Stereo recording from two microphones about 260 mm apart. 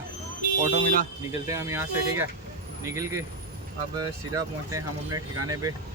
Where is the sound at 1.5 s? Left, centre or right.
Centre.